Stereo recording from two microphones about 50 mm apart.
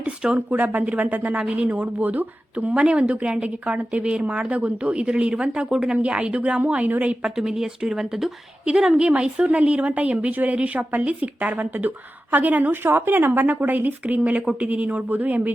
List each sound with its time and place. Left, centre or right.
0.3 s speech: right
2.7 s speech: right
7.2 s speech: centre; by 12.8 s right
12.8 s speech: right